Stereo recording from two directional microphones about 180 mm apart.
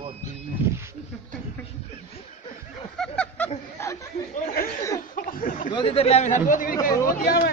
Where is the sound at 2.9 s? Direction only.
5° left (ahead or behind).